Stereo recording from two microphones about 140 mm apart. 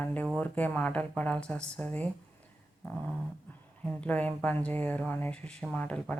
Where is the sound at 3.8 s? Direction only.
10° left (ahead or behind).